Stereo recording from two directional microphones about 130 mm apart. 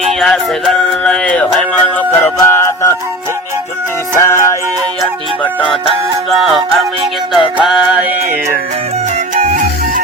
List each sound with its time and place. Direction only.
0.1 s music: centre (ahead or behind); by 2.9 s 20° left (ahead or behind)
4.2 s music: 20° left (ahead or behind)
6.3 s music: centre (ahead or behind)